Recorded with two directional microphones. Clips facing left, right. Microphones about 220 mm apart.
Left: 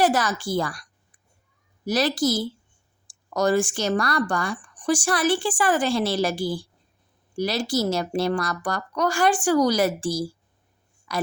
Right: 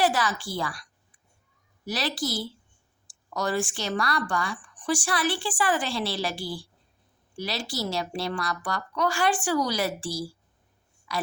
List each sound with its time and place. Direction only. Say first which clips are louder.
0.0 s speech: left 4 dB; 45° left (ahead or behind)